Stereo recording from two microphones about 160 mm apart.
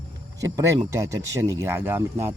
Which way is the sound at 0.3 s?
20° right (ahead or behind).